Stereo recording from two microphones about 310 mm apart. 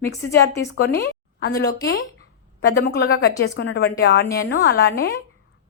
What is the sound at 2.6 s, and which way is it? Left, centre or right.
A woman's voice, left.